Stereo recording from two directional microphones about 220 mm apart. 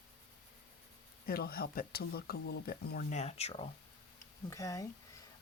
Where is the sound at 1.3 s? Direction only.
45° left (ahead or behind); by 3.6 s 30° left (ahead or behind).